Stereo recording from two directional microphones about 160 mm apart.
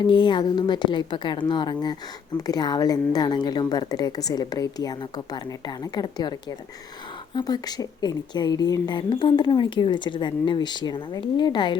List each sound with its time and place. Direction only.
0.0 s a woman's voice: 30° left (ahead or behind)
7.3 s a woman's voice: 25° left (ahead or behind)